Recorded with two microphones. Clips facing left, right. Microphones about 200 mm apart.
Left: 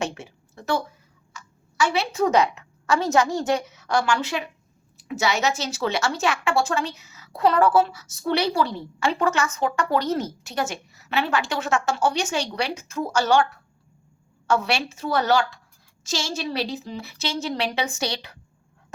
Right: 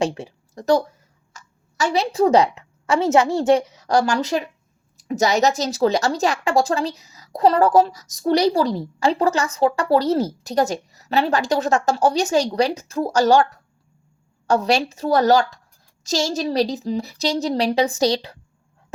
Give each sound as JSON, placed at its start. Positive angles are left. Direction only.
{"t": 0.0, "sound": "a woman's voice", "side_deg": -35}